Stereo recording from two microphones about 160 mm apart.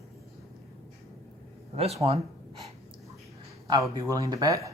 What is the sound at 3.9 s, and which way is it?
Speech, 20° right (ahead or behind).